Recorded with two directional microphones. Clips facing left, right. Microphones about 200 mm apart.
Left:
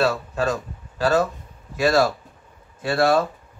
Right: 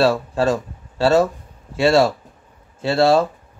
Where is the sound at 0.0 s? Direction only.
30° right (ahead or behind).